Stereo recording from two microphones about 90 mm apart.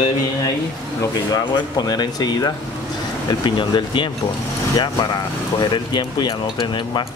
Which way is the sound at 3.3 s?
60° left (ahead or behind).